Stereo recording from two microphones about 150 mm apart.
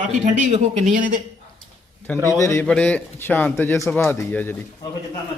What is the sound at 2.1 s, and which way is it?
Speech, 20° right (ahead or behind).